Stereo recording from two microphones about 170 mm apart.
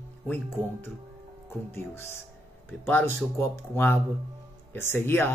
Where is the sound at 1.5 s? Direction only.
15° left (ahead or behind).